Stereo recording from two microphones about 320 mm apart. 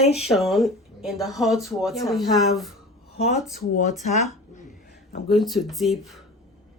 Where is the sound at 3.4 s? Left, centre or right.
Centre.